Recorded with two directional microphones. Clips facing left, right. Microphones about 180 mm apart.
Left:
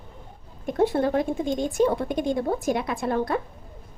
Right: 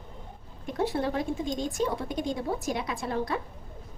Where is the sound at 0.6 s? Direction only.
50° left (ahead or behind).